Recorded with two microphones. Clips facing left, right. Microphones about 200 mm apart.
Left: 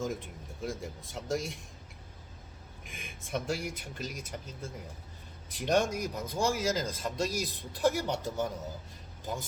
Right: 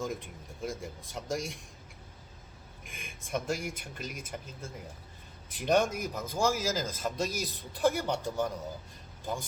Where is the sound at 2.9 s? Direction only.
Centre (ahead or behind).